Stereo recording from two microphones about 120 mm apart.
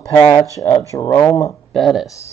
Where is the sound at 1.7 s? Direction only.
Centre (ahead or behind).